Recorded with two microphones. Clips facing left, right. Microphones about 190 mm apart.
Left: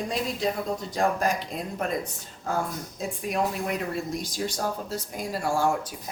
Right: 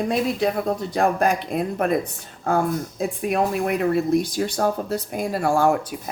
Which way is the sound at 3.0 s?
60° right (ahead or behind).